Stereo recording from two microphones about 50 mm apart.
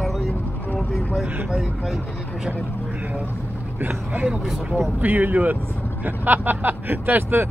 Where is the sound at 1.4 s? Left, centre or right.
Centre.